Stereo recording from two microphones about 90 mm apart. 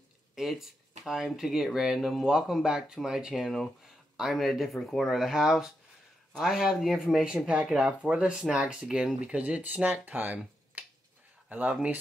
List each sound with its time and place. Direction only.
0.4 s speech: 5° right (ahead or behind); by 10.4 s 20° right (ahead or behind)
11.4 s speech: 15° right (ahead or behind)